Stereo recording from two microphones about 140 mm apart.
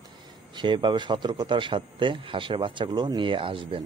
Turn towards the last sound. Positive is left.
turn(degrees=-40)  # may be behind; listen again after turning